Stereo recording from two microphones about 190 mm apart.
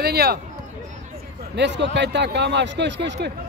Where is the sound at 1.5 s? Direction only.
65° right (ahead or behind).